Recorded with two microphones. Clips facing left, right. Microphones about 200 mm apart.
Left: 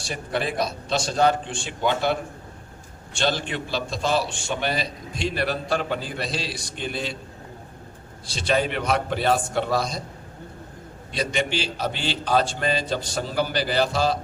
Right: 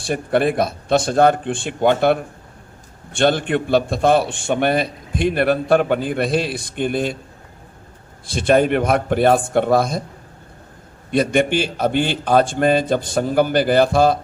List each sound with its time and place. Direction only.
0.0 s a man's voice: 55° right (ahead or behind)
8.3 s a man's voice: 55° right (ahead or behind)
11.1 s a man's voice: 55° right (ahead or behind)